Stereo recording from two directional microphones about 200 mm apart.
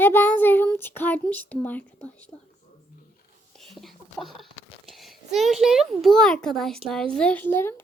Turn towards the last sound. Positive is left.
turn(degrees=10)  # may be behind; listen again after turning